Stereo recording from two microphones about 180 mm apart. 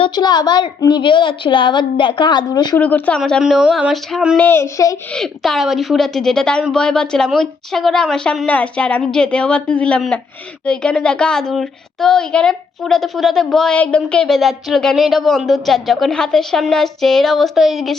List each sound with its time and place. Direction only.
0.0 s a woman's voice: 25° left (ahead or behind)
2.7 s a child's voice: 10° left (ahead or behind)
4.4 s a woman's voice: 10° left (ahead or behind)
5.1 s a child's voice: centre (ahead or behind)